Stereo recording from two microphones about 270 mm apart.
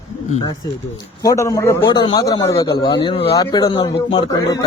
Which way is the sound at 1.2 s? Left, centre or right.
Centre.